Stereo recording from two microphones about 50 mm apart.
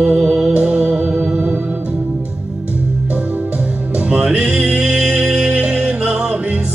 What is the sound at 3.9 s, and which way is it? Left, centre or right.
Music, centre.